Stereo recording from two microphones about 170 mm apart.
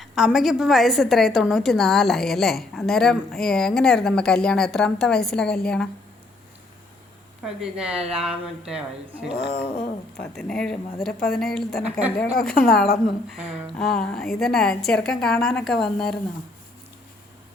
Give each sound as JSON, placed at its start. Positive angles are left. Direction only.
{"t": 0.0, "sound": "a woman's voice", "side_deg": 0}
{"t": 7.4, "sound": "a woman's voice", "side_deg": -5}
{"t": 9.4, "sound": "a sound", "side_deg": 70}
{"t": 10.2, "sound": "a woman's voice", "side_deg": 5}